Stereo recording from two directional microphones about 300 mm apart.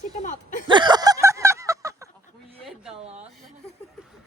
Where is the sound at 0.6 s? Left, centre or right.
Centre.